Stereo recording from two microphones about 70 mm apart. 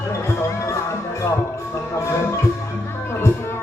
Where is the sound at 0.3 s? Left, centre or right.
Left.